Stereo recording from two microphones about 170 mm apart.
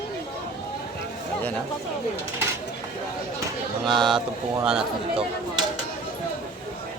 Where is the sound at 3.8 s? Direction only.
Centre (ahead or behind).